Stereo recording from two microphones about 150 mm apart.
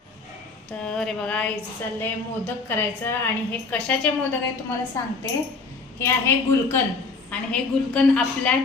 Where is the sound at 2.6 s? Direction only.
15° left (ahead or behind).